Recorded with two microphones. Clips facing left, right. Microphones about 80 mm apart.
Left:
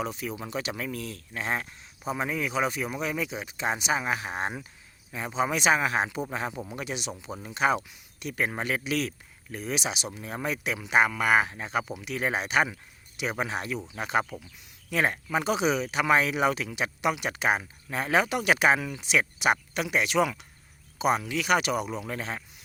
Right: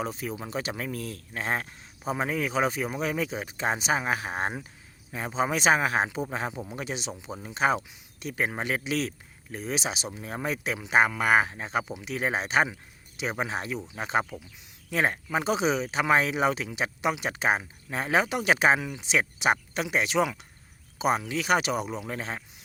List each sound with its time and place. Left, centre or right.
0.0 s speech: right